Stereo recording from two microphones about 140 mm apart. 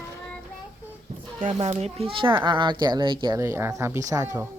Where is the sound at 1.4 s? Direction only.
45° right (ahead or behind).